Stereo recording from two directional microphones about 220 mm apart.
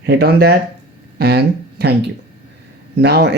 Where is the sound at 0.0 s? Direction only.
50° right (ahead or behind).